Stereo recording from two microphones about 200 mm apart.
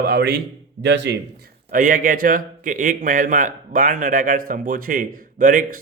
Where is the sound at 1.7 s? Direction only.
40° right (ahead or behind).